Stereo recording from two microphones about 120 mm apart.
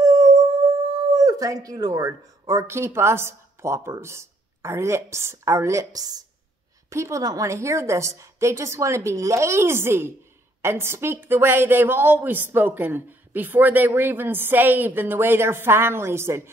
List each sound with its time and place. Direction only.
0.0 s a woman's voice: 30° right (ahead or behind)